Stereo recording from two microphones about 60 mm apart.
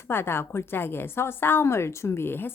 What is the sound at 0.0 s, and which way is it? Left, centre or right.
A woman's voice, left.